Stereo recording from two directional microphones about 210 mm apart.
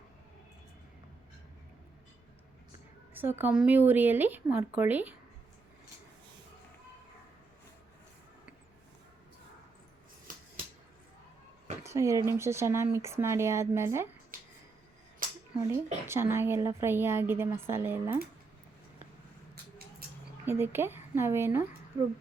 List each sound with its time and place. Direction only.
3.2 s speech: 10° right (ahead or behind)
11.8 s speech: 15° right (ahead or behind)
15.5 s speech: 15° right (ahead or behind)
20.4 s speech: 10° right (ahead or behind)